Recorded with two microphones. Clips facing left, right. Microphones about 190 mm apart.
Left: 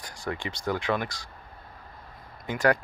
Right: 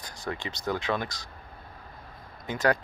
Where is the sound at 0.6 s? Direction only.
15° left (ahead or behind).